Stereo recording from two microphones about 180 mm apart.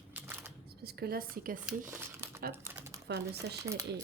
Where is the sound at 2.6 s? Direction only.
15° right (ahead or behind).